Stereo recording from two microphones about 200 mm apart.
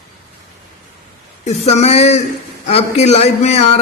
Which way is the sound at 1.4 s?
35° left (ahead or behind).